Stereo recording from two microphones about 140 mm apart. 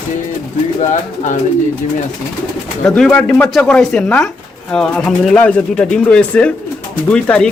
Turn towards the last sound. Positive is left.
turn(degrees=10)  # may be behind; listen again after turning